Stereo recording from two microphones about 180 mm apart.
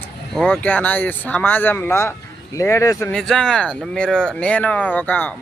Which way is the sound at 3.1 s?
5° left (ahead or behind).